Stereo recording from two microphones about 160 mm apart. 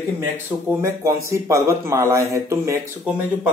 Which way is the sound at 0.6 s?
20° right (ahead or behind).